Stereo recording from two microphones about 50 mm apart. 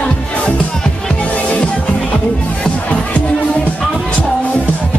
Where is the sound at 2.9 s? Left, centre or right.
Left.